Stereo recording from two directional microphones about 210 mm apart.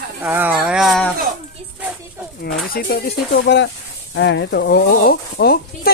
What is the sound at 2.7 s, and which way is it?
Speech, 45° left (ahead or behind).